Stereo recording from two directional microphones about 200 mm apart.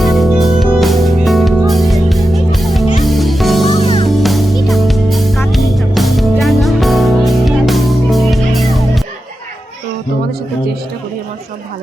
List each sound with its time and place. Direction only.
0.0 s music: centre (ahead or behind)
3.8 s music: 25° left (ahead or behind)
4.2 s music: centre (ahead or behind)